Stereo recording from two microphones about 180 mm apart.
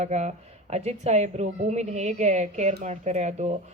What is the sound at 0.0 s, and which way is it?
A woman's voice, 40° right (ahead or behind).